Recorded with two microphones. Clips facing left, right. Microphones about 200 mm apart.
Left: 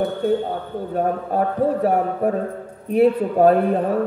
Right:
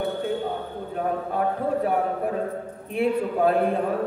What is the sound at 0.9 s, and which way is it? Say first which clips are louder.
A man's voice: left 5 dB; 40° left (ahead or behind).